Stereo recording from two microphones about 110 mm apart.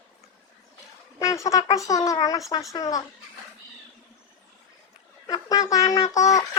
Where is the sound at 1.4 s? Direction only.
30° left (ahead or behind).